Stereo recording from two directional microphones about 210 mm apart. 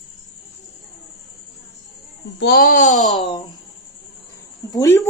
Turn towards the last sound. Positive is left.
turn(degrees=15)  # may be behind; listen again after turning